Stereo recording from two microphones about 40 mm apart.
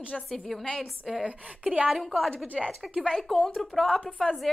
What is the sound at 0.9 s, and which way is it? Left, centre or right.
A woman's voice, centre.